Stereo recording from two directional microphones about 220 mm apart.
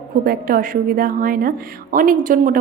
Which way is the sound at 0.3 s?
40° right (ahead or behind).